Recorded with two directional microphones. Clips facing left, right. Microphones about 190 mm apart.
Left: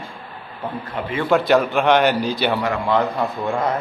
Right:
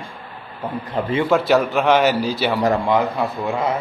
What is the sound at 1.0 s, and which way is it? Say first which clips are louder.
Speech: right 6 dB; 35° right (ahead or behind).